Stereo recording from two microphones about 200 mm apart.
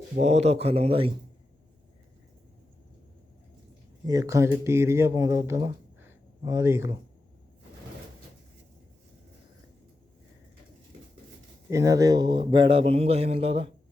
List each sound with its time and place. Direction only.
0.2 s speech: 35° right (ahead or behind)
4.0 s speech: 15° right (ahead or behind)
11.7 s a man's voice: 15° right (ahead or behind)